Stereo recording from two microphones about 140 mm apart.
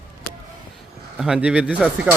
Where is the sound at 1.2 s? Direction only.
5° right (ahead or behind).